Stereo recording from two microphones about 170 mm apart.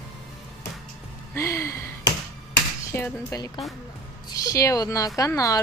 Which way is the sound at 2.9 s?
15° left (ahead or behind).